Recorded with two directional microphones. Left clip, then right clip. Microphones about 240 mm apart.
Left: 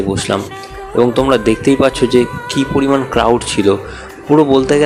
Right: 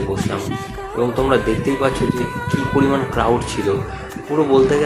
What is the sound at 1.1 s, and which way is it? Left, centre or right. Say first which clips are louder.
Speech: left 5 dB; left.